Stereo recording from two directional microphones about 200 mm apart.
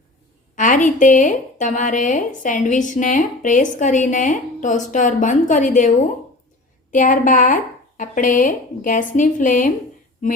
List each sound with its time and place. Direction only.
0.5 s a woman's voice: 40° left (ahead or behind)
6.9 s a woman's voice: 40° left (ahead or behind)